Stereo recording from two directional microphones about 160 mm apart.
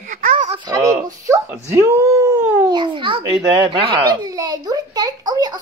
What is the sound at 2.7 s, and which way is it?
A child's voice, 30° right (ahead or behind).